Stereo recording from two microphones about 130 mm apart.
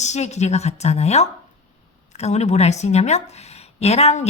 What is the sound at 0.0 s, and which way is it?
A woman's voice, 60° left (ahead or behind).